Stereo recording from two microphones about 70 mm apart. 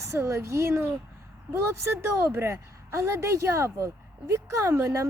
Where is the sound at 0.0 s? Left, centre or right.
Right.